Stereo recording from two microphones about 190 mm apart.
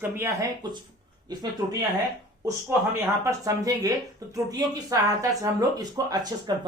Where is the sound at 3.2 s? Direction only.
15° right (ahead or behind).